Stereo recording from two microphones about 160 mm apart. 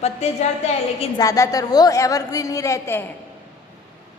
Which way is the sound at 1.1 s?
20° left (ahead or behind).